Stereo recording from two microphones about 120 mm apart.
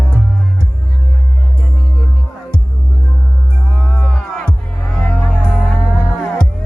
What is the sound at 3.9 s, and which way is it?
Music, 10° left (ahead or behind).